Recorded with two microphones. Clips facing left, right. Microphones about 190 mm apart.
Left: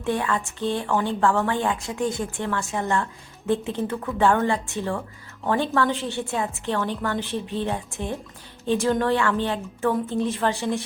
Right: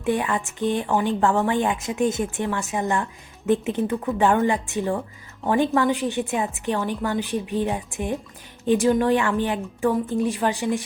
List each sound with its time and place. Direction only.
0.0 s a woman's voice: 15° right (ahead or behind)